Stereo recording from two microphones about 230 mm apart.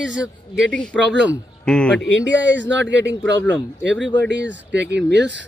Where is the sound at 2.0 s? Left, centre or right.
Left.